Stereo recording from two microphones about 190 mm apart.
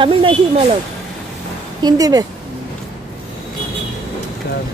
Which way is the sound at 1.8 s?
20° right (ahead or behind).